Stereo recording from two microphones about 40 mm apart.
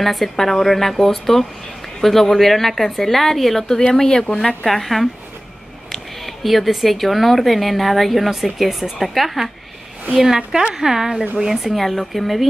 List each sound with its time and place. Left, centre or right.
0.0 s speech: centre
4.6 s speech: centre
6.2 s speech: centre